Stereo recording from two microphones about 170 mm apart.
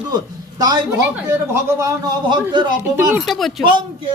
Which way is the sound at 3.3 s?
Centre (ahead or behind).